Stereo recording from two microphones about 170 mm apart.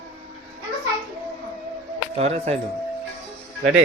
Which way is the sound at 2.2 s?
40° right (ahead or behind).